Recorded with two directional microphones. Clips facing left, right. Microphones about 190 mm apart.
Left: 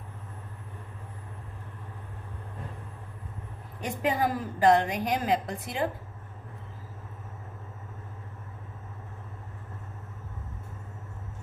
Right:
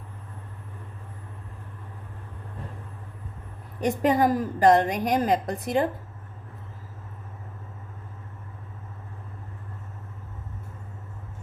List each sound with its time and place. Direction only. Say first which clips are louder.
3.8 s a woman's voice: right 6 dB; 40° right (ahead or behind)